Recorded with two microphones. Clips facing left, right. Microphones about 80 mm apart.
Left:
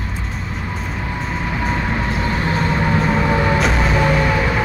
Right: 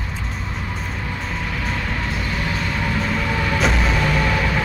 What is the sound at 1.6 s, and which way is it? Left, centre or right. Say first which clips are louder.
Vehicle: left 7 dB; left.